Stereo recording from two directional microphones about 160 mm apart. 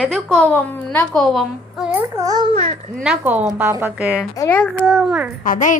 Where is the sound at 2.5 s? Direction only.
45° right (ahead or behind).